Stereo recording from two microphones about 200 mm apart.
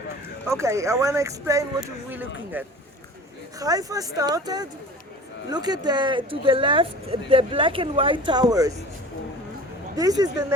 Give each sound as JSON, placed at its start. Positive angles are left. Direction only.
{"t": 0.4, "sound": "speech", "side_deg": -15}
{"t": 9.9, "sound": "speech", "side_deg": -20}